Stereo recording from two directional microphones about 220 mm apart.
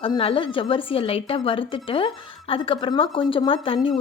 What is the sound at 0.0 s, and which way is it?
A woman's voice, 25° left (ahead or behind).